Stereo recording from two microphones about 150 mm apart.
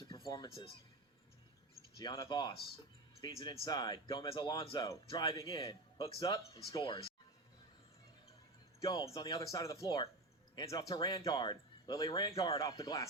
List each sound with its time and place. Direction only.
0.1 s a sound: 25° left (ahead or behind)
2.0 s speech: 25° left (ahead or behind)
4.9 s speech: 25° left (ahead or behind)
8.8 s speech: 25° left (ahead or behind)